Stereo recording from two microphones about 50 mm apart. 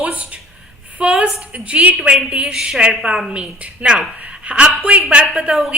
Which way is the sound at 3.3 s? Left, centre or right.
Right.